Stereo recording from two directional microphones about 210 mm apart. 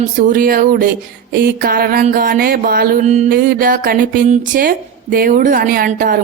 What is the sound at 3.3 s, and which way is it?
Speech, 50° right (ahead or behind).